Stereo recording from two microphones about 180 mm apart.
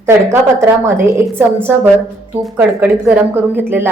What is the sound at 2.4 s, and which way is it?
A woman's voice, 5° right (ahead or behind).